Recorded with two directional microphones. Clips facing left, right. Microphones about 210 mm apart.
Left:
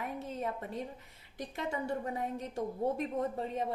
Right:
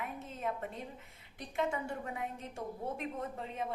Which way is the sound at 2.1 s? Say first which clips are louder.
Left 5 dB; 40° left (ahead or behind).